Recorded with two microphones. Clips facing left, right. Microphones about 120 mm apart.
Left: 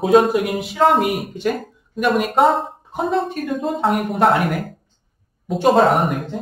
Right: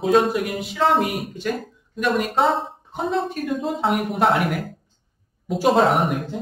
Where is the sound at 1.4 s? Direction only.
45° left (ahead or behind).